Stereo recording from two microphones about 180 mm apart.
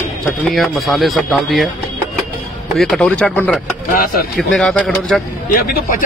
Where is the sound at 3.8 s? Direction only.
50° left (ahead or behind).